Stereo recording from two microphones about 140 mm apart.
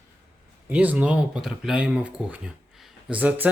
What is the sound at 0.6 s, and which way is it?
Speech, 10° right (ahead or behind).